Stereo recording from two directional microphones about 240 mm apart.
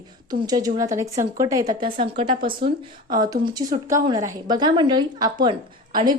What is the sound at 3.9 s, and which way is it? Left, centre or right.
A woman's voice, centre.